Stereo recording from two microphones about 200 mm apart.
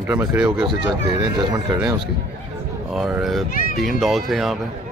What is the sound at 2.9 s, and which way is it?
Speech, centre (ahead or behind).